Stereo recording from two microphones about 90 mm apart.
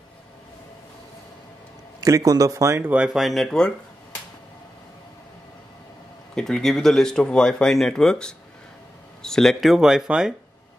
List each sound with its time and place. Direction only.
2.0 s speech: 40° right (ahead or behind)
2.8 s speech: 15° right (ahead or behind)
3.2 s speech: centre (ahead or behind)
6.3 s speech: 5° left (ahead or behind)